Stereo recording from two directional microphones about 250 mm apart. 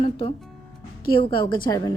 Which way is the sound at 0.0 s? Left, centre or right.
Left.